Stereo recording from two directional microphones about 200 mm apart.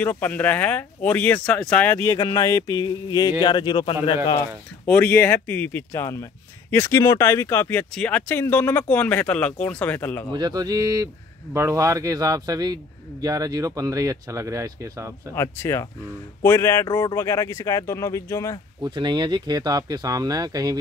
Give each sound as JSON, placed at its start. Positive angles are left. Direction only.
{"t": 0.0, "sound": "speech", "side_deg": 10}
{"t": 2.1, "sound": "speech", "side_deg": 25}
{"t": 4.4, "sound": "speech", "side_deg": 5}
{"t": 10.3, "sound": "speech", "side_deg": -20}
{"t": 15.3, "sound": "speech", "side_deg": 15}
{"t": 18.8, "sound": "speech", "side_deg": -20}